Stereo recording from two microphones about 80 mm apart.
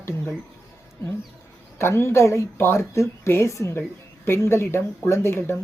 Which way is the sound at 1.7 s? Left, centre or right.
Left.